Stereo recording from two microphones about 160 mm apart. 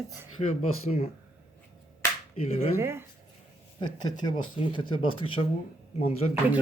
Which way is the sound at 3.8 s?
25° left (ahead or behind).